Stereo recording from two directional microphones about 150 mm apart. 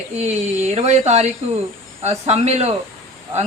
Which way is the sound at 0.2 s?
45° right (ahead or behind).